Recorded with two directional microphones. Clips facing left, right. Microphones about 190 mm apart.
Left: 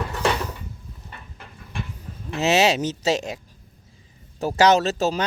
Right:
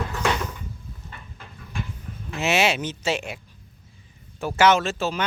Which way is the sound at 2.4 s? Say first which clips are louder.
Left 3 dB; 40° left (ahead or behind).